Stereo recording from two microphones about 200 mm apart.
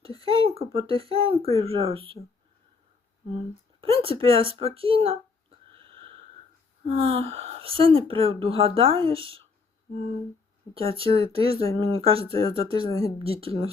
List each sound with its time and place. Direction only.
0.0 s speech: 25° right (ahead or behind)
3.3 s a sound: 30° right (ahead or behind)
7.1 s speech: 30° right (ahead or behind)
10.8 s speech: 25° right (ahead or behind)